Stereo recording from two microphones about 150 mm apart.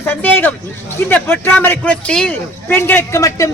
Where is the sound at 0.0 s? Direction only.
15° left (ahead or behind).